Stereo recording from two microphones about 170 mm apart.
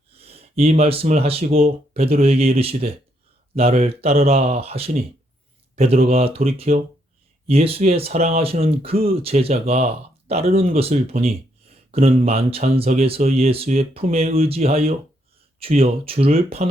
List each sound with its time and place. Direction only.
0.2 s speech: 35° right (ahead or behind)